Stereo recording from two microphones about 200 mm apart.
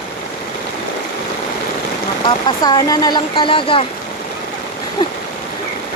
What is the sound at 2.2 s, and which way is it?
Speech, 20° left (ahead or behind).